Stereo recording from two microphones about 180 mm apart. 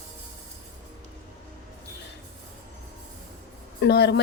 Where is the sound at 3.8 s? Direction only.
65° left (ahead or behind).